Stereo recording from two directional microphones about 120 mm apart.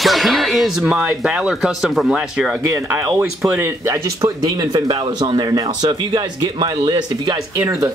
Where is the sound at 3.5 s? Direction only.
20° right (ahead or behind).